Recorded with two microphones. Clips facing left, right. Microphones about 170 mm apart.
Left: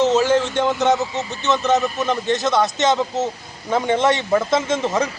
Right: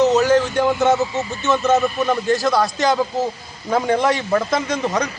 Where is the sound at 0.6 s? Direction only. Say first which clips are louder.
Right 2 dB; centre (ahead or behind).